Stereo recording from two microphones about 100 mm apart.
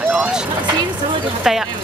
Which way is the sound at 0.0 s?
10° right (ahead or behind).